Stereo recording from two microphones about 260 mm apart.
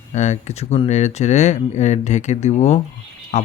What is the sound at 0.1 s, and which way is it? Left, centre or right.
Speech, left.